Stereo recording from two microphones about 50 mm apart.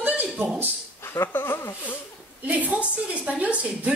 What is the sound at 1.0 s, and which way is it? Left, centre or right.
Speech, left.